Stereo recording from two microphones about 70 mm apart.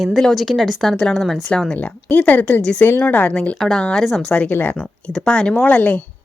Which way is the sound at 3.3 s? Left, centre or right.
Centre.